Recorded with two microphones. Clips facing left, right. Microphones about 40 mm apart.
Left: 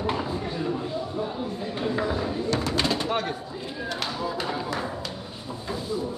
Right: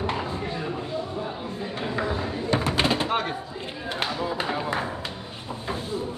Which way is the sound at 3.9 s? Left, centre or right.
Right.